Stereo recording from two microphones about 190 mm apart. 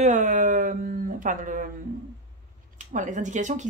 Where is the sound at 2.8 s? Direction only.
40° right (ahead or behind).